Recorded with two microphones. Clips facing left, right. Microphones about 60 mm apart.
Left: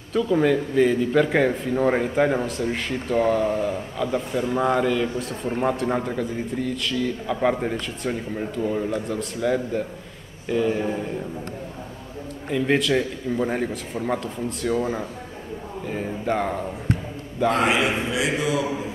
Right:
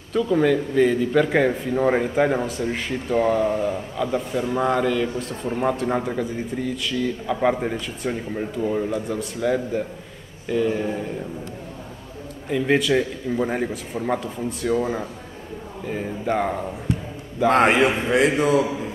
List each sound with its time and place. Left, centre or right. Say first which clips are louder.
0.1 s a man's voice: right 1 dB; centre
12.4 s a man's voice: right 1 dB; centre
16.9 s a sound: even; left
17.5 s a man's voice: right 4 dB; right